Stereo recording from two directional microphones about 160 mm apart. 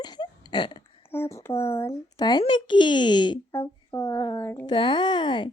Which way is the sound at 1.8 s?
20° left (ahead or behind).